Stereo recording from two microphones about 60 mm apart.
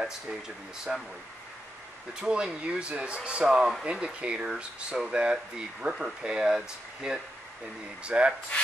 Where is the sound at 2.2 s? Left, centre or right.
Centre.